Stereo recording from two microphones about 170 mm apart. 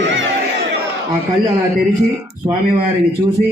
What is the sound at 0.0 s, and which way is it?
Crowd, 90° right.